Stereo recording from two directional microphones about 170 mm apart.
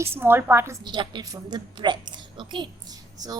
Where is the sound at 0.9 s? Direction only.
25° right (ahead or behind).